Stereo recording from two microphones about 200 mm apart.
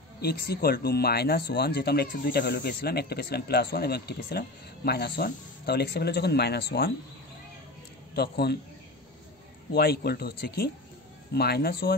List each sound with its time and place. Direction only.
0.2 s speech: 50° left (ahead or behind)
8.1 s speech: 55° left (ahead or behind)
9.7 s speech: 50° left (ahead or behind)